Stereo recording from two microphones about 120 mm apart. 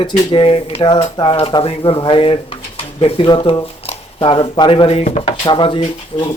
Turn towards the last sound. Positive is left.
turn(degrees=45)  # may be behind; listen again after turning